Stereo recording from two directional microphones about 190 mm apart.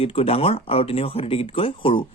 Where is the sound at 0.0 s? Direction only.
30° left (ahead or behind).